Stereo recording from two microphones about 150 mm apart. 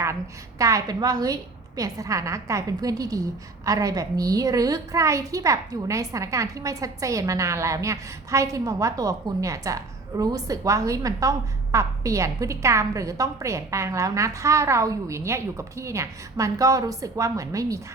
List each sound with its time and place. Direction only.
0.6 s a child's voice: 25° right (ahead or behind)